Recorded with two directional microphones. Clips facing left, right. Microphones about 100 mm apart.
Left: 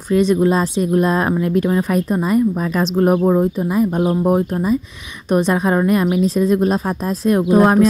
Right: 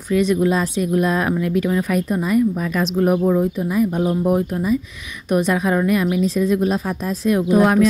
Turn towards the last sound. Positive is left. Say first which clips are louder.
# left 2 dB
turn(degrees=35)  # may be behind; listen again after turning